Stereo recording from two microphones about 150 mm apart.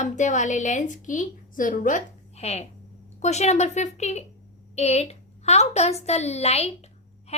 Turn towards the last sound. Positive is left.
turn(degrees=45)  # may be behind; listen again after turning